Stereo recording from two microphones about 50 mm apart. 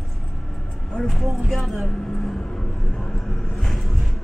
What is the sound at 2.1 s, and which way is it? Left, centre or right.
Vehicle, centre.